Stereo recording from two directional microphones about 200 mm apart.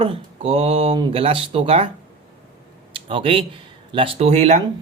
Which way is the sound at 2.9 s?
25° right (ahead or behind).